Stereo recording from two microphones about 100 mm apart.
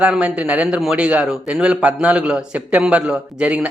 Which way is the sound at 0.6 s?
5° right (ahead or behind).